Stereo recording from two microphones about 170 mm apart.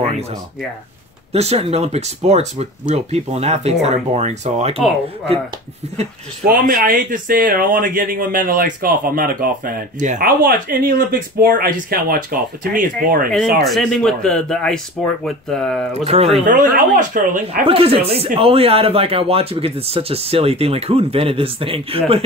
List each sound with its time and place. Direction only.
1.3 s speech: 40° right (ahead or behind)
6.4 s speech: 55° right (ahead or behind)
13.7 s a man's voice: centre (ahead or behind)
15.9 s speech: 35° right (ahead or behind)
16.4 s speech: 55° right (ahead or behind)
17.6 s speech: 35° right (ahead or behind)